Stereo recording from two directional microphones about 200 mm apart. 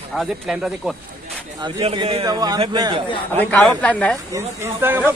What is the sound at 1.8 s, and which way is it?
A man's voice, 25° right (ahead or behind).